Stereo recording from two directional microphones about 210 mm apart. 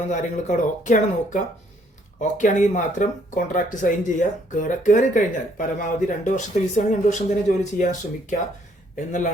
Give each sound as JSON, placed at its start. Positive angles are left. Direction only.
{"t": 0.1, "sound": "speech", "side_deg": 35}
{"t": 2.4, "sound": "speech", "side_deg": 35}
{"t": 9.0, "sound": "speech", "side_deg": 35}